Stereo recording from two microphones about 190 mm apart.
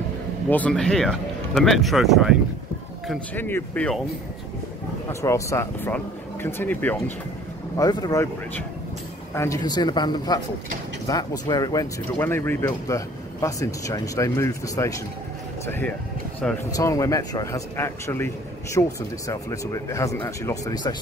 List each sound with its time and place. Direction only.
0.5 s speech: 5° left (ahead or behind)
3.3 s speech: 10° left (ahead or behind)
5.2 s speech: 15° left (ahead or behind)
7.7 s a man's voice: 20° left (ahead or behind); by 16.6 s 5° left (ahead or behind)
16.7 s speech: 15° left (ahead or behind)